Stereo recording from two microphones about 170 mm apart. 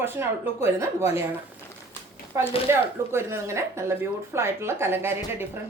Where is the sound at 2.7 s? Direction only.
15° right (ahead or behind).